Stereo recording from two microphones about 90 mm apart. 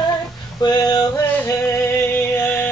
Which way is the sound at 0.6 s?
45° left (ahead or behind).